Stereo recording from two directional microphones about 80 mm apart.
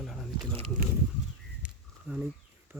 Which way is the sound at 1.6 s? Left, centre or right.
Centre.